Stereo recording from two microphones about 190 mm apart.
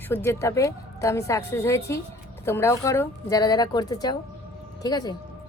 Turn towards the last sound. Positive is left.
turn(degrees=20)  # may be behind; listen again after turning